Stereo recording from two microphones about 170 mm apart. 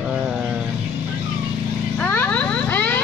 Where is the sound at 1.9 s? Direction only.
10° left (ahead or behind).